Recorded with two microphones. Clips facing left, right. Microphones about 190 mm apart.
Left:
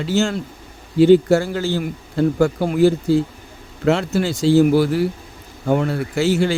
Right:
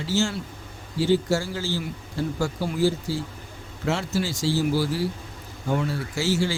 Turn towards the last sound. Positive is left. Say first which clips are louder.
# left 7 dB
turn(degrees=60)  # may be behind; listen again after turning